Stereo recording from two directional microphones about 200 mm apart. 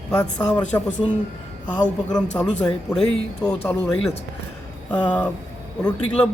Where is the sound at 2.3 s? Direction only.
10° left (ahead or behind).